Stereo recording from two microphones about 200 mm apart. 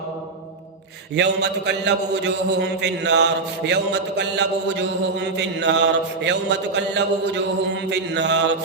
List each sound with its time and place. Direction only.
1.1 s mantra: 60° right (ahead or behind)